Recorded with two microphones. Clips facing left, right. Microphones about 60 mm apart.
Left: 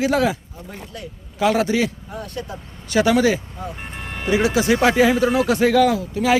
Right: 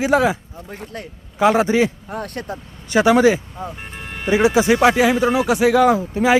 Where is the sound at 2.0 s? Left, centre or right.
Right.